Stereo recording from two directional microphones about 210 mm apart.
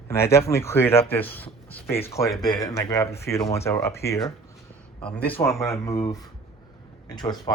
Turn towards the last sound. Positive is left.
turn(degrees=20)  # may be behind; listen again after turning